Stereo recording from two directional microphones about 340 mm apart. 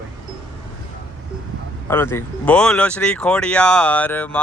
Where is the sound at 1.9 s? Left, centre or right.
Centre.